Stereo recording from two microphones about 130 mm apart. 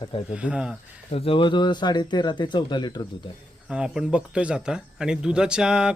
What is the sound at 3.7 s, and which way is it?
Speech, 5° right (ahead or behind).